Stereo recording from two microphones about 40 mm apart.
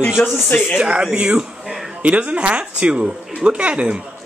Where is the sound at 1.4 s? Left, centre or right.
Centre.